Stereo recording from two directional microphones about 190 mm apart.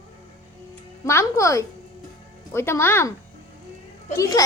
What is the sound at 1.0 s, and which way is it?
A child's voice, 15° left (ahead or behind).